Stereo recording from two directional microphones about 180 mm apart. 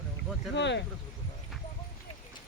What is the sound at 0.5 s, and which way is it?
Speech, 80° left.